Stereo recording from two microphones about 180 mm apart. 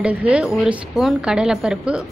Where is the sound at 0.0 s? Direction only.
10° right (ahead or behind).